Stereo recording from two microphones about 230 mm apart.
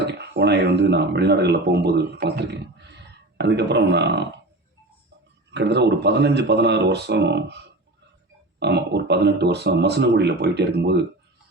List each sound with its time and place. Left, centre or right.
0.0 s speech: right
5.5 s speech: right